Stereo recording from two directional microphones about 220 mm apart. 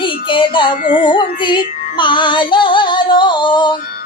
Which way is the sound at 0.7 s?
40° left (ahead or behind).